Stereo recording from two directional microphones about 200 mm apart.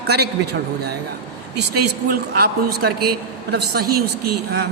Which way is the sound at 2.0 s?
50° right (ahead or behind).